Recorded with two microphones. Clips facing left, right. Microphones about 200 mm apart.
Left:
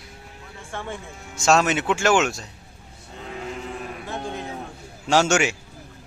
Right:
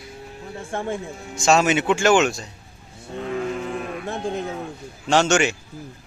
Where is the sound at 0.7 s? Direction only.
45° right (ahead or behind).